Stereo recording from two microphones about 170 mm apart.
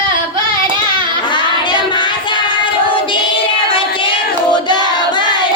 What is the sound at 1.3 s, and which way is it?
Child singing, 25° left (ahead or behind).